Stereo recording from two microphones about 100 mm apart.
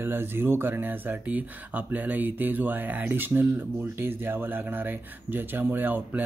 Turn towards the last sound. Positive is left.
turn(degrees=-20)  # may be behind; listen again after turning